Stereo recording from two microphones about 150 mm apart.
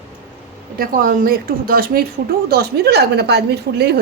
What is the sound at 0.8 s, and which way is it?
A woman's voice, 75° right (ahead or behind).